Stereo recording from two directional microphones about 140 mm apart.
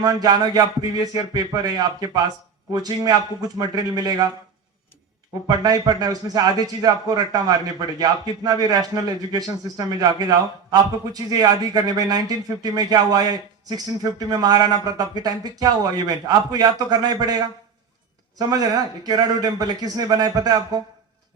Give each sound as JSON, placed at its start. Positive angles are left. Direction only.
{"t": 0.0, "sound": "a man's voice", "side_deg": -25}
{"t": 5.5, "sound": "a man's voice", "side_deg": -25}